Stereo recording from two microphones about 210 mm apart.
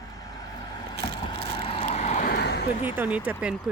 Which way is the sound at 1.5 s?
25° left (ahead or behind).